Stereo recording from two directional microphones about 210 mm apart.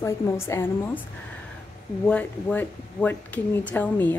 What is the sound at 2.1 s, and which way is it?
Speech, 5° left (ahead or behind).